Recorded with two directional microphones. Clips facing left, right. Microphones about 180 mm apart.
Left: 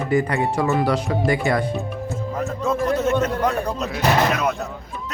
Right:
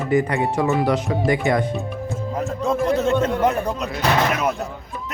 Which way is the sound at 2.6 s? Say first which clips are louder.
Right 1 dB; 15° right (ahead or behind).